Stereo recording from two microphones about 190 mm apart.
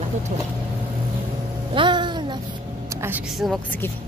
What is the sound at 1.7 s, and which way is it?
Music, 25° right (ahead or behind).